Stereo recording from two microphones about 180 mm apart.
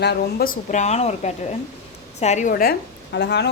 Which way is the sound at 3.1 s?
70° left (ahead or behind).